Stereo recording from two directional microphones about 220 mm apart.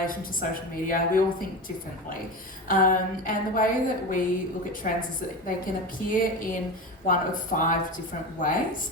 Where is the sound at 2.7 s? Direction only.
40° left (ahead or behind).